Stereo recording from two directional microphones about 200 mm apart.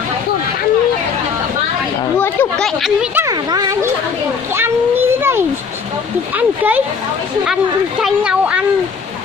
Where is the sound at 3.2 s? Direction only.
20° right (ahead or behind).